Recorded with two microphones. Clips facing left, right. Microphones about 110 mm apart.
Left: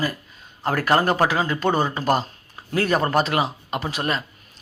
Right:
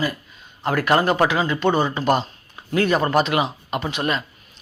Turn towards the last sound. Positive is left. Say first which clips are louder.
# right 2 dB
turn(degrees=35)  # may be behind; listen again after turning